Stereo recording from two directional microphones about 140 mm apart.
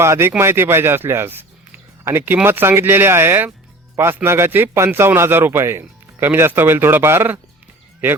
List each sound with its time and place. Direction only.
0.0 s a man's voice: 20° right (ahead or behind)